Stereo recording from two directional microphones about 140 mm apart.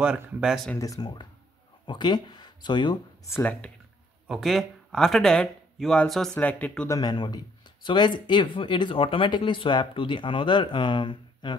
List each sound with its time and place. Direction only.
0.0 s speech: 5° right (ahead or behind)
0.7 s speech: 25° left (ahead or behind)
3.3 s speech: 15° left (ahead or behind)
4.3 s speech: centre (ahead or behind)
6.9 s speech: 30° left (ahead or behind)